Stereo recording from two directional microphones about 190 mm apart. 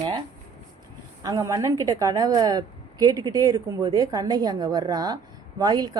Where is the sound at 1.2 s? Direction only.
15° right (ahead or behind).